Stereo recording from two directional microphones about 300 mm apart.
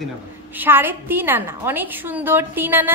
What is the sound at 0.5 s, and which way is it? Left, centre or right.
A woman's voice, centre.